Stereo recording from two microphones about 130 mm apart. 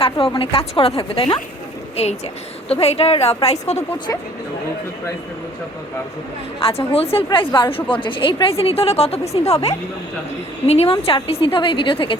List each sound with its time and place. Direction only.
0.0 s a woman's voice: 45° left (ahead or behind)
6.6 s a woman's voice: 45° left (ahead or behind)